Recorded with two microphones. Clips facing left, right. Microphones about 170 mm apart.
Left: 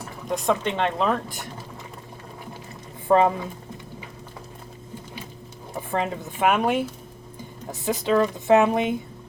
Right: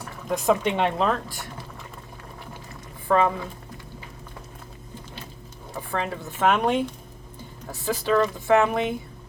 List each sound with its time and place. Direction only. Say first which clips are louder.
0.3 s speech: right 2 dB; centre (ahead or behind)
3.1 s a woman's voice: left 3 dB; 20° left (ahead or behind)
5.7 s speech: left 2 dB; 20° left (ahead or behind)
7.7 s a woman's voice: left 1 dB; 20° left (ahead or behind)